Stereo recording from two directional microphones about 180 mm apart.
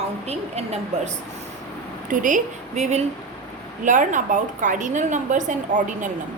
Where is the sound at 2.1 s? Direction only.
45° right (ahead or behind).